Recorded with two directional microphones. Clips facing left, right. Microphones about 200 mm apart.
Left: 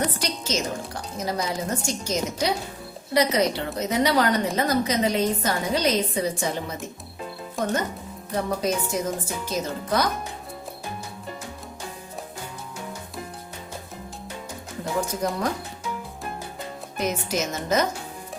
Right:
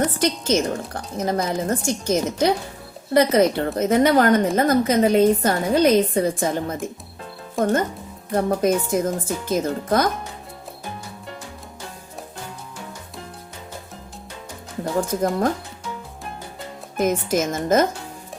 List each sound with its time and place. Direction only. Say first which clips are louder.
0.2 s a woman's voice: right 8 dB; 55° right (ahead or behind)
15.0 s a woman's voice: right 5 dB; 50° right (ahead or behind)
17.0 s a woman's voice: right 6 dB; 50° right (ahead or behind)